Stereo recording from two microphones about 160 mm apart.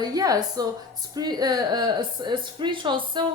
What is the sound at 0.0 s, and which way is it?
A woman's voice, 25° right (ahead or behind).